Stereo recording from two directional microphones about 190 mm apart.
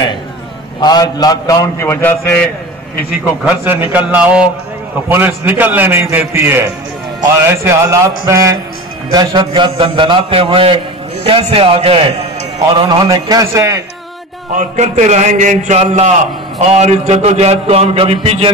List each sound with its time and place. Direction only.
0.7 s a man's voice: 20° left (ahead or behind)
3.4 s a man's voice: 10° right (ahead or behind); by 12.3 s 30° right (ahead or behind)
12.7 s a man's voice: 20° right (ahead or behind)
14.5 s a man's voice: 40° right (ahead or behind)